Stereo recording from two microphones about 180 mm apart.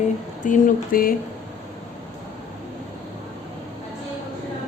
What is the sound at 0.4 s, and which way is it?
Speech, 50° left (ahead or behind).